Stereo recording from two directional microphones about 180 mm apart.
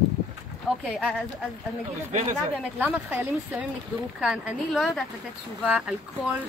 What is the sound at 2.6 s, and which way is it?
Speech, 10° right (ahead or behind).